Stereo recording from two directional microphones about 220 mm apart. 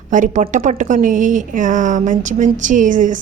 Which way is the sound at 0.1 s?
35° right (ahead or behind).